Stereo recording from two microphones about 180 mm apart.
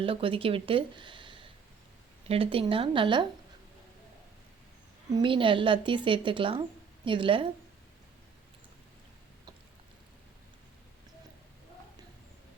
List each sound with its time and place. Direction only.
0.0 s speech: 30° right (ahead or behind)
5.1 s speech: 30° right (ahead or behind)